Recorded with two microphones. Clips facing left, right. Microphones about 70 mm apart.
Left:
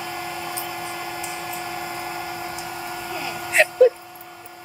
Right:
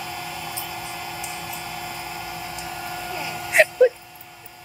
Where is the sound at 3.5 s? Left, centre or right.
Centre.